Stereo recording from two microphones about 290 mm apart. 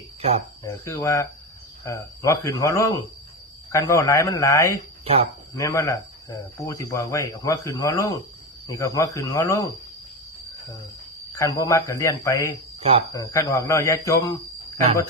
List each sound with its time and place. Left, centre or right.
0.2 s speech: right
0.6 s speech: centre
11.3 s speech: centre